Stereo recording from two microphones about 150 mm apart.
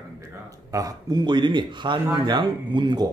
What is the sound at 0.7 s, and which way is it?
A man's voice, 20° right (ahead or behind).